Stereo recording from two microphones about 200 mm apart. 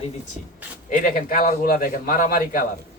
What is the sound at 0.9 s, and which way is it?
A man's voice, 45° left (ahead or behind).